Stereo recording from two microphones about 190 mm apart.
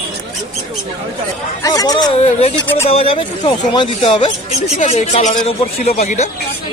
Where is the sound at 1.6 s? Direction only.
20° left (ahead or behind).